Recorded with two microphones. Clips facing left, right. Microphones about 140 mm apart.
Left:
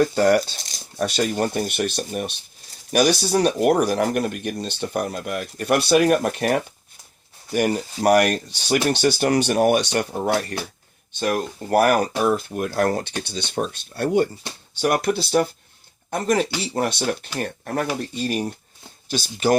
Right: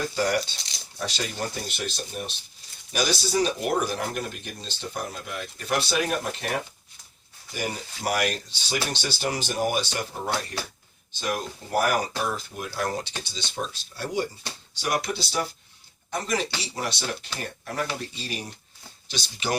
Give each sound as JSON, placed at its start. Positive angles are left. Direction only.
{"t": 0.0, "sound": "speech", "side_deg": 60}